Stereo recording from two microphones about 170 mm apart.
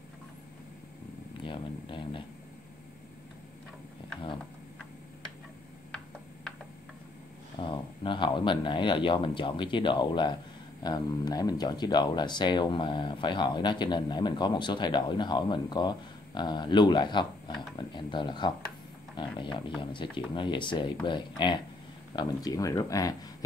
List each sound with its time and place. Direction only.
1.4 s speech: 30° left (ahead or behind)
7.6 s speech: 30° left (ahead or behind)